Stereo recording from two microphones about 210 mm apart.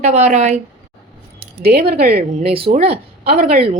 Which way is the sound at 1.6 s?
50° right (ahead or behind).